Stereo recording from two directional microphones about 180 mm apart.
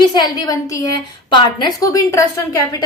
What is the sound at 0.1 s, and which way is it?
A woman's voice, 20° left (ahead or behind).